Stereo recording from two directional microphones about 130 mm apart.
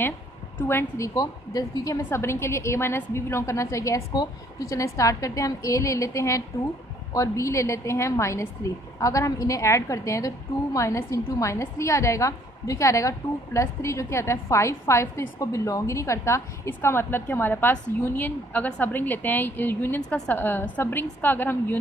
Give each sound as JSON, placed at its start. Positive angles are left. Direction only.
{"t": 0.6, "sound": "a woman's voice", "side_deg": 20}